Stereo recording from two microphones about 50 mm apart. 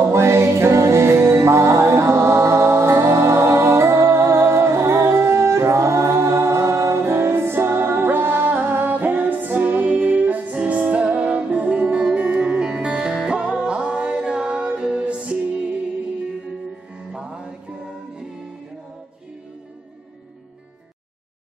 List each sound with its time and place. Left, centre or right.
0.0 s music: right
7.0 s music: right
17.1 s music: centre